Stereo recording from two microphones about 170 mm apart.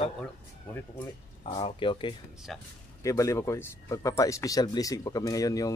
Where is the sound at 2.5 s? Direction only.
Centre (ahead or behind).